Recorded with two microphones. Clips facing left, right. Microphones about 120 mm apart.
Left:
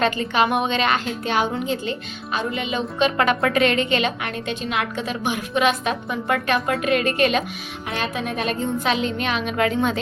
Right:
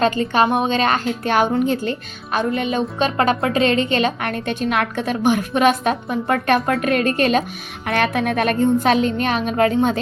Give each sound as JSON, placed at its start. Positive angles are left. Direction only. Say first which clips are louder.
{"t": 0.0, "sound": "a woman's voice", "louder": "right 3 dB", "side_deg": -35}
{"t": 3.0, "sound": "a woman's voice", "louder": "even", "side_deg": -35}
{"t": 7.9, "sound": "a woman's voice", "louder": "right 7 dB", "side_deg": -60}